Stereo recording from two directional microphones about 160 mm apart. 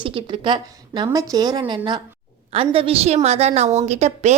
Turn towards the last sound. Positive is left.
turn(degrees=-45)  # may be behind; listen again after turning